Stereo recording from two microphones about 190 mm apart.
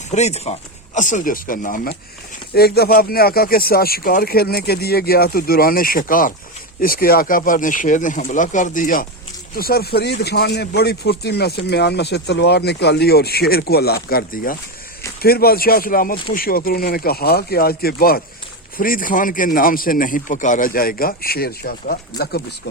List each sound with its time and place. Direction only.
0.1 s speech: 35° left (ahead or behind); by 22.4 s 55° left (ahead or behind)